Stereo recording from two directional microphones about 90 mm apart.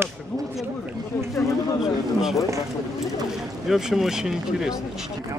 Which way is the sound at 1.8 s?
5° right (ahead or behind).